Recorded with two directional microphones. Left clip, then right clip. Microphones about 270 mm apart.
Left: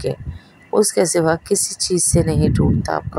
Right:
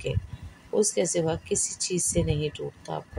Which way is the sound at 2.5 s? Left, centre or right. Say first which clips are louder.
Left 14 dB; left.